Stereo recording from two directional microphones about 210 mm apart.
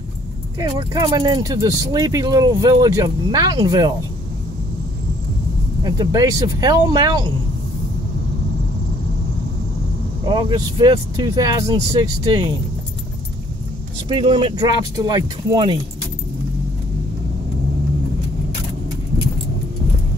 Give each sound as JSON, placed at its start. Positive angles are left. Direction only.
{"t": 0.6, "sound": "speech", "side_deg": -15}
{"t": 5.9, "sound": "speech", "side_deg": -15}
{"t": 10.2, "sound": "speech", "side_deg": -20}
{"t": 14.0, "sound": "speech", "side_deg": -25}